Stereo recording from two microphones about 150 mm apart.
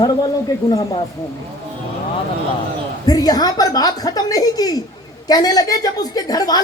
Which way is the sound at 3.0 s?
25° left (ahead or behind).